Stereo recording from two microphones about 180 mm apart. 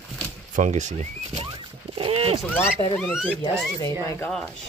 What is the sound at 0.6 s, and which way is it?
Horse, 40° right (ahead or behind).